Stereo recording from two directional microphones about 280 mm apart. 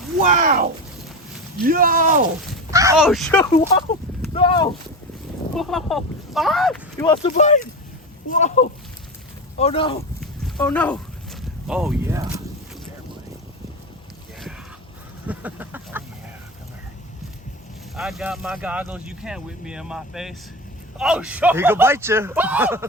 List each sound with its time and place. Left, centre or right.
0.2 s speech: right
2.6 s speech: centre
3.1 s speech: centre
4.2 s speech: centre
5.5 s speech: centre
7.0 s speech: centre
10.2 s a sound: centre
15.3 s a sound: centre
17.9 s speech: centre